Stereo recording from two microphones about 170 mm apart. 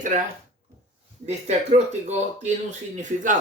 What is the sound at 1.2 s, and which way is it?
A man's voice, 40° right (ahead or behind).